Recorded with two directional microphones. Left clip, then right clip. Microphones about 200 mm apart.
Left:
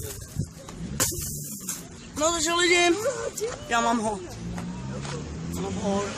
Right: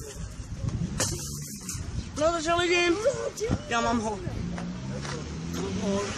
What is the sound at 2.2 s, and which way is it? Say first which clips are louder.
Speech: left 1 dB; 40° left (ahead or behind).